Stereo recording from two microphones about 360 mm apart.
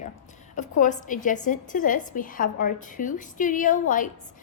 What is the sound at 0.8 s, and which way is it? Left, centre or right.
A woman's voice, left.